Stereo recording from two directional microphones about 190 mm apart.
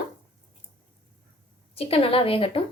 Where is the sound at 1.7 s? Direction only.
30° left (ahead or behind).